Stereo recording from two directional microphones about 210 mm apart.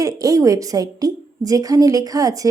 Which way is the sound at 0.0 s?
15° right (ahead or behind).